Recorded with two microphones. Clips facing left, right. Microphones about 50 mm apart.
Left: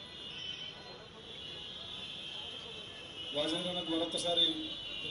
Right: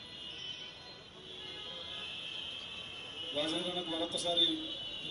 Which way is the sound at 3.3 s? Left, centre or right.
Right.